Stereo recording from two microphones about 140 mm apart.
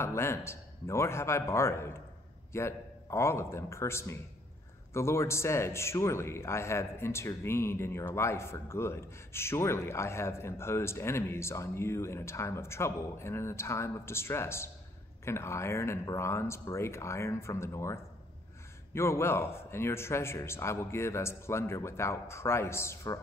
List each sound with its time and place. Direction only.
0.0 s a man's voice: 20° left (ahead or behind)
18.9 s a man's voice: 20° left (ahead or behind)